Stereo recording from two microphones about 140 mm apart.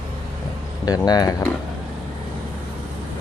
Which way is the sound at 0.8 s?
30° left (ahead or behind).